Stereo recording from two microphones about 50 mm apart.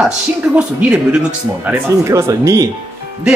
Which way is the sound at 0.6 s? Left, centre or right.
Right.